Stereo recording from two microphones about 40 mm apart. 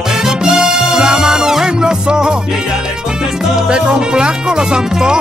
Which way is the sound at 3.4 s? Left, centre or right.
Centre.